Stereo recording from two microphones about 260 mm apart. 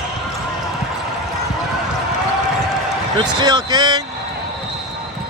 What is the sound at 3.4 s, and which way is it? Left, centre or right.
Speech, centre.